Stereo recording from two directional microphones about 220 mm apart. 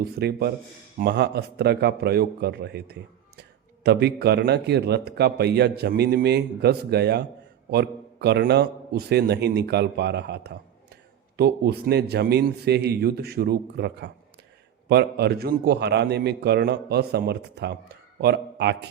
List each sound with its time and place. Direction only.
0.0 s a man's voice: 45° right (ahead or behind)